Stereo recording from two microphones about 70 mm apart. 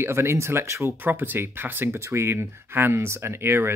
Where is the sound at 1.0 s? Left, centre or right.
Right.